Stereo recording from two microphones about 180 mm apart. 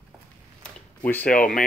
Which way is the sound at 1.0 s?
10° left (ahead or behind).